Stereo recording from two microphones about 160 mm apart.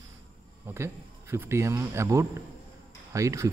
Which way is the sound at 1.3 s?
15° right (ahead or behind).